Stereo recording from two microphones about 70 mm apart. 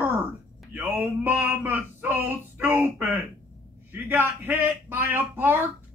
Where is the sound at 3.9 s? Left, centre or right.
Right.